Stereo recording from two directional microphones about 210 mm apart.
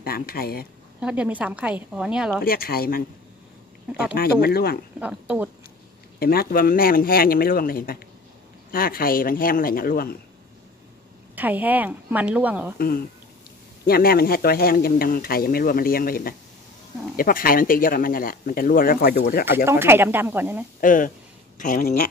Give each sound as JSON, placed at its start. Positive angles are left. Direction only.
{"t": 0.0, "sound": "speech", "side_deg": 45}
{"t": 1.0, "sound": "a woman's voice", "side_deg": -5}
{"t": 2.4, "sound": "speech", "side_deg": 45}
{"t": 4.1, "sound": "speech", "side_deg": 50}
{"t": 4.9, "sound": "a woman's voice", "side_deg": -5}
{"t": 6.1, "sound": "speech", "side_deg": 45}
{"t": 11.3, "sound": "a woman's voice", "side_deg": -10}
{"t": 12.7, "sound": "speech", "side_deg": 45}
{"t": 19.4, "sound": "a woman's voice", "side_deg": -10}
{"t": 20.8, "sound": "speech", "side_deg": 40}